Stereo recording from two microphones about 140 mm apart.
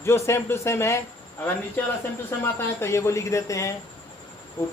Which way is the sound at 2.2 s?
15° left (ahead or behind).